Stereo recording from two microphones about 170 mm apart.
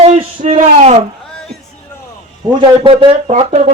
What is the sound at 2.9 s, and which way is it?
Speech, 30° right (ahead or behind).